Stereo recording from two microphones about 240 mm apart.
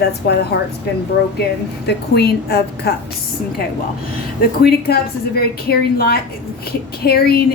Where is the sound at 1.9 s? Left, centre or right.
Left.